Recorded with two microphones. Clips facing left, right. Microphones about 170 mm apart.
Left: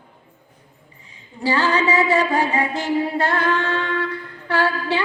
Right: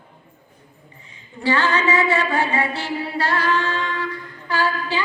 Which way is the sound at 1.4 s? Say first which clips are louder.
Left 1 dB; 35° left (ahead or behind).